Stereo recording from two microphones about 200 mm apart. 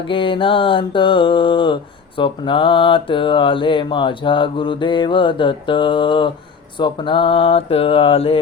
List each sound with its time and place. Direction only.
0.1 s mantra: 25° left (ahead or behind)